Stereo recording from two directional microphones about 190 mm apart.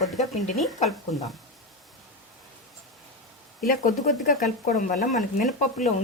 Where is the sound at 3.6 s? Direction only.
45° left (ahead or behind).